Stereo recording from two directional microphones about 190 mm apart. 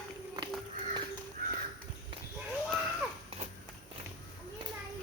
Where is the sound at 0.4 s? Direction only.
20° right (ahead or behind).